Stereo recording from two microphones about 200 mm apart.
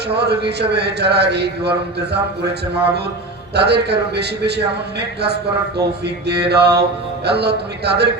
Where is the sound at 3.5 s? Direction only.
55° right (ahead or behind).